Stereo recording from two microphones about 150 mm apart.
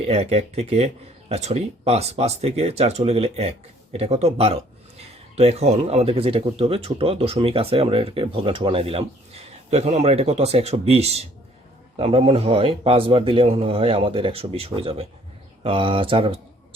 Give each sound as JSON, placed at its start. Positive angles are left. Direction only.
{"t": 0.0, "sound": "speech", "side_deg": -45}